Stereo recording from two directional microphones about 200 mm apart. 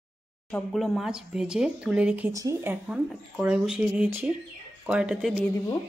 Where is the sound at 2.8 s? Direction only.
5° right (ahead or behind).